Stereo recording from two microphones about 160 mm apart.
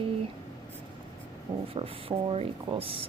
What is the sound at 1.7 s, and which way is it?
A woman's voice, 35° right (ahead or behind).